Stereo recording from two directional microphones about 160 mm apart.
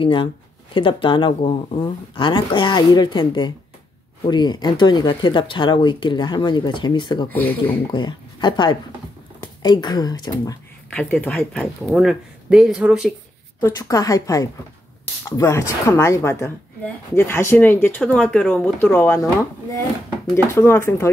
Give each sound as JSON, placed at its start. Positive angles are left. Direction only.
{"t": 0.0, "sound": "speech", "side_deg": 30}
{"t": 7.2, "sound": "speech", "side_deg": 10}
{"t": 7.9, "sound": "speech", "side_deg": 30}
{"t": 10.9, "sound": "speech", "side_deg": 10}
{"t": 13.6, "sound": "speech", "side_deg": 20}
{"t": 20.3, "sound": "speech", "side_deg": 15}